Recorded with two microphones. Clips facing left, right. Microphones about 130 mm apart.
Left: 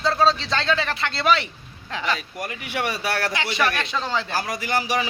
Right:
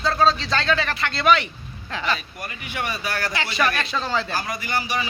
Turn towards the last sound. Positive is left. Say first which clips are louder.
# left 2 dB
turn(degrees=90)